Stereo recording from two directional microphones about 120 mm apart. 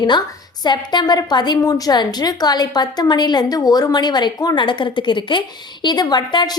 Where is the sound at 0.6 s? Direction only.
35° left (ahead or behind).